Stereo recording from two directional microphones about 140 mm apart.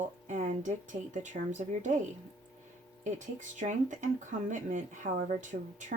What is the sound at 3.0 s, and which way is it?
Speech, 60° right (ahead or behind).